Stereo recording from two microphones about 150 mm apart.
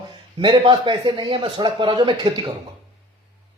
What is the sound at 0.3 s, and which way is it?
A man's voice, 35° right (ahead or behind).